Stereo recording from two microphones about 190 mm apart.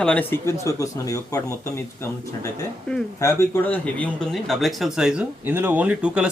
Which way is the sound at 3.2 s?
15° left (ahead or behind).